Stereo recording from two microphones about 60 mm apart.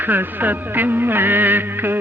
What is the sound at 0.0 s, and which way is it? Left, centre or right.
Music, right.